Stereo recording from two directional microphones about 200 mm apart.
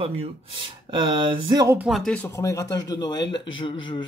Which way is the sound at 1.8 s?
Centre (ahead or behind).